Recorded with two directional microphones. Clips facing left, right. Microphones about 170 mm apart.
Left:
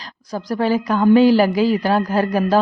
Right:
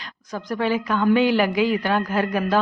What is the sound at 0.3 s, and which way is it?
Speech, 35° left (ahead or behind).